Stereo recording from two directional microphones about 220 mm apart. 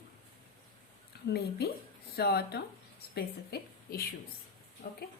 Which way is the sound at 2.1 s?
45° left (ahead or behind).